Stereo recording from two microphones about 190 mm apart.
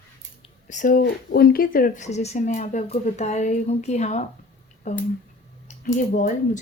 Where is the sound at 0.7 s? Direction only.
45° left (ahead or behind).